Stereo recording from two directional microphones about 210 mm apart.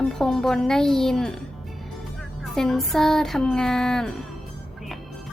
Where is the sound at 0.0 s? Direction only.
Centre (ahead or behind).